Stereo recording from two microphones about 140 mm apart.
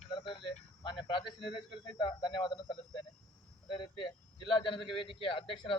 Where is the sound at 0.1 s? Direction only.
35° left (ahead or behind).